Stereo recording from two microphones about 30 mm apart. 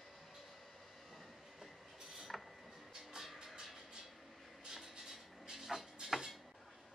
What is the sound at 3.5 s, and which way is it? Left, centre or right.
Vehicle, centre.